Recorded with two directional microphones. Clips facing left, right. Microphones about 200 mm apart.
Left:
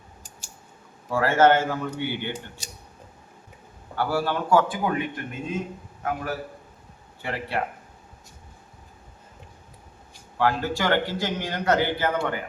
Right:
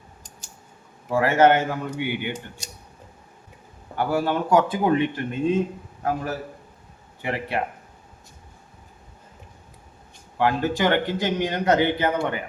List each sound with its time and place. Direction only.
1.0 s a man's voice: 15° right (ahead or behind)
3.9 s a man's voice: 20° right (ahead or behind)
7.2 s a man's voice: 15° right (ahead or behind)
10.3 s a man's voice: 20° right (ahead or behind)